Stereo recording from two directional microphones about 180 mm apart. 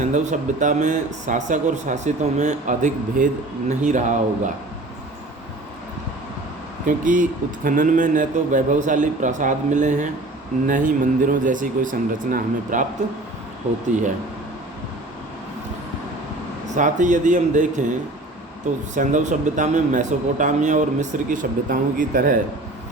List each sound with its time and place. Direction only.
0.0 s speech: 45° right (ahead or behind)
6.8 s speech: 45° right (ahead or behind)
16.6 s speech: 45° right (ahead or behind)
18.9 s speech: 45° right (ahead or behind)